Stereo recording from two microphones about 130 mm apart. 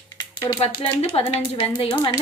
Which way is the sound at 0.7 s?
40° left (ahead or behind).